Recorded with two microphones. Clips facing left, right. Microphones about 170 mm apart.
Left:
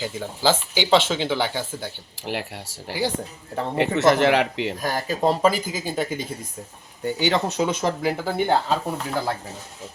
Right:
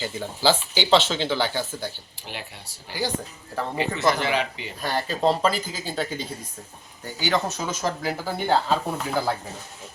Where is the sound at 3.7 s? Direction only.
65° left (ahead or behind).